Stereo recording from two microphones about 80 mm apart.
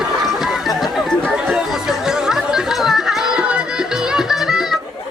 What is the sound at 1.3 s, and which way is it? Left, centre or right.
Chatter, centre.